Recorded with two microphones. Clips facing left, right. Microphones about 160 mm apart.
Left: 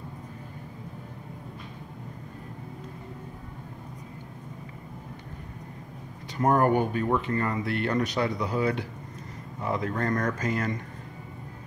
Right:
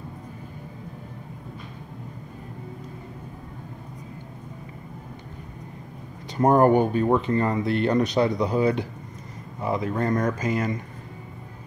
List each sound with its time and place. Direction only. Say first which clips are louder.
6.3 s speech: right 5 dB; 30° right (ahead or behind); by 10.8 s 10° right (ahead or behind)